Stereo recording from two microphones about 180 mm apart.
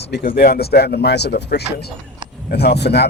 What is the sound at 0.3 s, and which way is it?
Speech, 60° left (ahead or behind).